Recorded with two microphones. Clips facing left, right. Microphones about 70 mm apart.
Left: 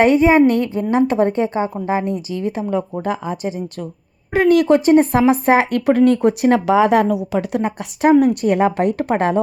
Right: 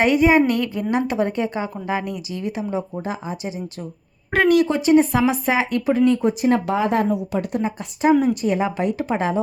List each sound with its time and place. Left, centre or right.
0.0 s a woman's voice: left
2.6 s a woman's voice: left
8.0 s speech: left